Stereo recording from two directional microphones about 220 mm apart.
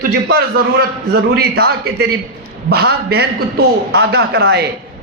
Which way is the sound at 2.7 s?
45° right (ahead or behind).